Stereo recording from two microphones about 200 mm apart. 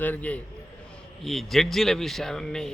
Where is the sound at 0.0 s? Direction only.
10° left (ahead or behind).